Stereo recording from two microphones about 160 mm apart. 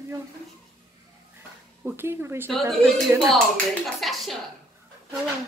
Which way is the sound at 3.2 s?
Centre (ahead or behind).